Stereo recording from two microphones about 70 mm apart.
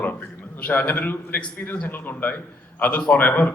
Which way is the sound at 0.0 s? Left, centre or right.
Left.